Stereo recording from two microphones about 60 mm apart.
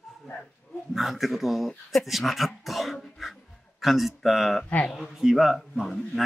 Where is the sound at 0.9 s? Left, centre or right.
Centre.